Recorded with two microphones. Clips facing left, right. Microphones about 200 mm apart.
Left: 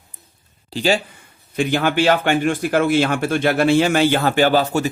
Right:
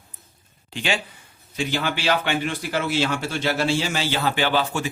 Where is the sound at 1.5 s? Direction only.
55° left (ahead or behind).